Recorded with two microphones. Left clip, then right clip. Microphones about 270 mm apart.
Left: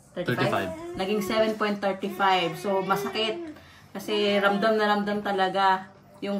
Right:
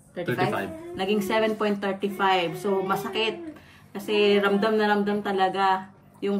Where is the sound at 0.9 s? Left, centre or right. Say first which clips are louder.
Right 1 dB; centre.